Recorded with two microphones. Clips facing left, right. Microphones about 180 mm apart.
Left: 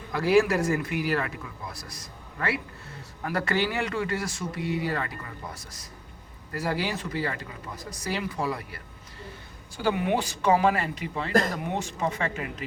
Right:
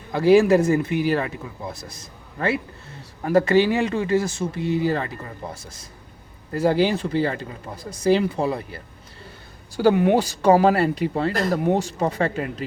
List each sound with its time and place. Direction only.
0.1 s speech: 25° right (ahead or behind)
9.7 s speech: 40° right (ahead or behind)